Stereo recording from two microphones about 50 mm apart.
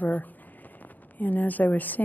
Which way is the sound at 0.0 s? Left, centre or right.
Left.